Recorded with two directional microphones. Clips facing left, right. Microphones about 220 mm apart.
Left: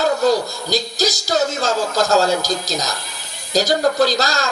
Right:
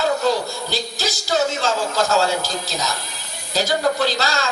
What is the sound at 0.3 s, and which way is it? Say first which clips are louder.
Speech: left 3 dB; 40° left (ahead or behind).